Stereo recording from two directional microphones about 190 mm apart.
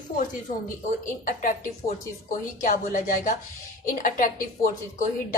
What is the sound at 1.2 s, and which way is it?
Speech, 45° left (ahead or behind).